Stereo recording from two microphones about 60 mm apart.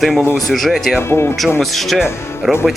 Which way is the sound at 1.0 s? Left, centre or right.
Left.